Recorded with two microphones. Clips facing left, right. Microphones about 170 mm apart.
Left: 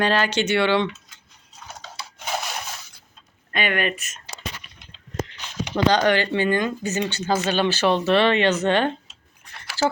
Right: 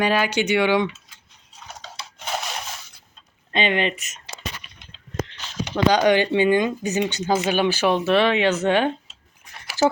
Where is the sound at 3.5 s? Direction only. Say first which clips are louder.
Right 2 dB; 25° right (ahead or behind).